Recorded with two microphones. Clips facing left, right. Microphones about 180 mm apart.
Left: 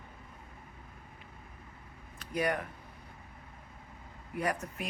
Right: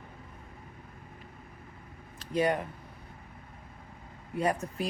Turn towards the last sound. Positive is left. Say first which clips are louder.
# right 5 dB
turn(degrees=-30)  # may be behind; listen again after turning